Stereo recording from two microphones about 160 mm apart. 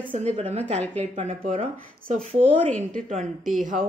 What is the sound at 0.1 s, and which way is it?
Speech, 45° right (ahead or behind).